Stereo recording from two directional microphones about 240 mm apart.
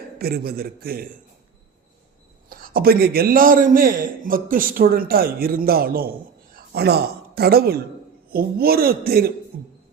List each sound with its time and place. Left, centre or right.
0.2 s a man's voice: right
2.5 s a man's voice: right